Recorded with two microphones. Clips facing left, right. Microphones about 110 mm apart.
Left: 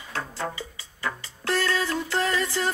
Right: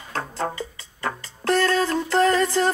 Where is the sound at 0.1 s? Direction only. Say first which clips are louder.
Right 4 dB; 35° right (ahead or behind).